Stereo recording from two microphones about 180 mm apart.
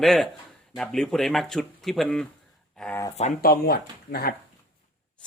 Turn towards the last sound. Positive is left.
turn(degrees=60)  # may be behind; listen again after turning